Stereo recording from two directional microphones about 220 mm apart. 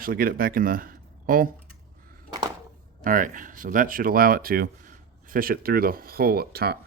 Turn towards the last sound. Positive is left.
turn(degrees=-45)  # may be behind; listen again after turning